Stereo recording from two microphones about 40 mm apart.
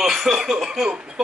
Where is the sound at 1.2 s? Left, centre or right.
Centre.